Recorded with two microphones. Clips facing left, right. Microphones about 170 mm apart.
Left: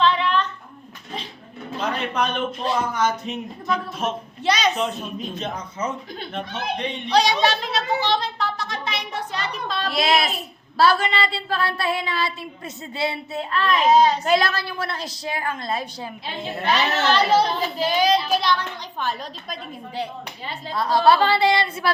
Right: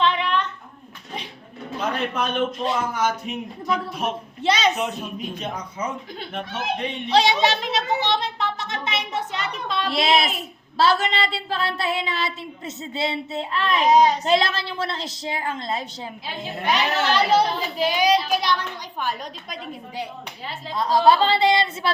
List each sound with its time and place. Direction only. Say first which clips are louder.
0.0 s a sound: left 2 dB; 20° right (ahead or behind)
2.9 s speech: left 1 dB; 10° right (ahead or behind)
4.4 s speech: right 1 dB; 25° right (ahead or behind)
4.8 s speech: left 1 dB; 10° right (ahead or behind)
7.1 s speech: even; 25° right (ahead or behind)
8.0 s a sound: left 1 dB; 20° right (ahead or behind)
10.8 s speech: left 1 dB; 25° right (ahead or behind); by 20.7 s centre (ahead or behind)
20.7 s speech: even; 20° right (ahead or behind)